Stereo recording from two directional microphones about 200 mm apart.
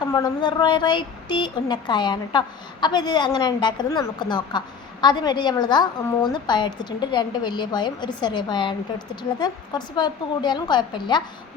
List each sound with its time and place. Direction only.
0.1 s a woman's voice: 20° left (ahead or behind)